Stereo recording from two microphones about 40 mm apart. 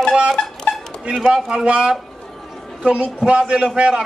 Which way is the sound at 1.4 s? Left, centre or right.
Right.